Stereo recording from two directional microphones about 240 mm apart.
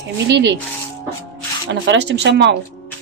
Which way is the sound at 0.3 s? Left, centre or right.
Right.